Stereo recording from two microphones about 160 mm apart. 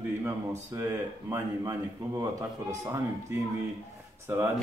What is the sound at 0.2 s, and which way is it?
A man's voice, 15° right (ahead or behind).